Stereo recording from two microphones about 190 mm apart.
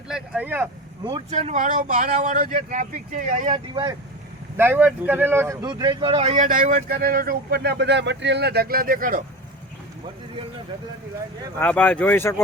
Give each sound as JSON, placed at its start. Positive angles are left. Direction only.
{"t": 0.1, "sound": "speech", "side_deg": -10}
{"t": 1.3, "sound": "speech", "side_deg": -35}
{"t": 3.4, "sound": "speech", "side_deg": -25}
{"t": 4.5, "sound": "speech", "side_deg": -10}
{"t": 11.6, "sound": "speech", "side_deg": 10}